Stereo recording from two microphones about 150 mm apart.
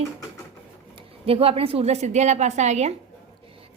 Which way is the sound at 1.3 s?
40° right (ahead or behind).